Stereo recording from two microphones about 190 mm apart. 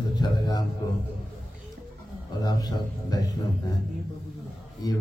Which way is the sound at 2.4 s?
20° left (ahead or behind).